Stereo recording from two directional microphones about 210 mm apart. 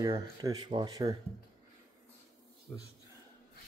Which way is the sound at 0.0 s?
15° right (ahead or behind).